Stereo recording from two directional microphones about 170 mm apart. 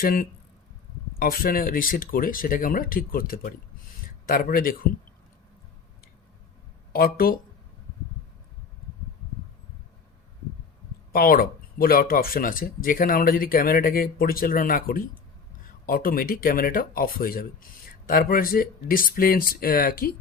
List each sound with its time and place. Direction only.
0.0 s speech: 55° left (ahead or behind)
6.9 s speech: 60° left (ahead or behind)
11.1 s speech: 60° left (ahead or behind)